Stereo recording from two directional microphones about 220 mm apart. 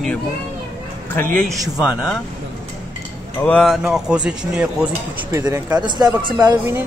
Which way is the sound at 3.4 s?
5° left (ahead or behind).